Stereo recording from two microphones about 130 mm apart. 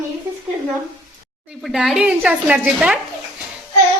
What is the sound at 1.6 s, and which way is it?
A woman's voice, centre (ahead or behind).